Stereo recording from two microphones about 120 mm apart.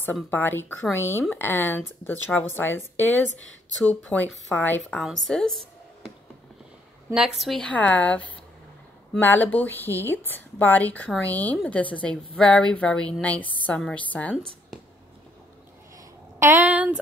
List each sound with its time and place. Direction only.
0.0 s a woman's voice: 15° left (ahead or behind)
4.0 s a woman's voice: 10° left (ahead or behind)
5.0 s speech: 5° left (ahead or behind)
7.2 s a woman's voice: centre (ahead or behind)
16.3 s speech: 20° right (ahead or behind)